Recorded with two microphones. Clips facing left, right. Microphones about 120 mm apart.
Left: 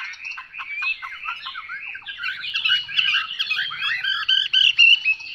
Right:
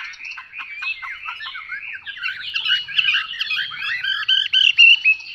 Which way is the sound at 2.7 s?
25° left (ahead or behind).